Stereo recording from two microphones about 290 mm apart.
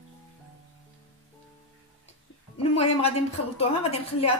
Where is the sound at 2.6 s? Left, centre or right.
Left.